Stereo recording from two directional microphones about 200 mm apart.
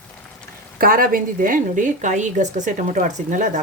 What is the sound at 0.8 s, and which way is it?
A woman's voice, 45° right (ahead or behind).